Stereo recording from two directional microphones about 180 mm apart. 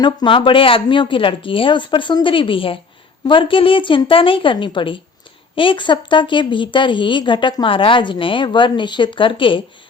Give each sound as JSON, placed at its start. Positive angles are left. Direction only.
{"t": 0.0, "sound": "a woman's voice", "side_deg": 25}